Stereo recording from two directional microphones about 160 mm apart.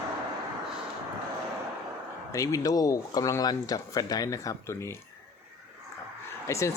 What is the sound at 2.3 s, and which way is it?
Speech, 20° left (ahead or behind).